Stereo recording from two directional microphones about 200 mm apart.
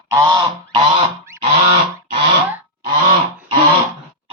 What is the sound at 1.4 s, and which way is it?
Goose, 30° right (ahead or behind).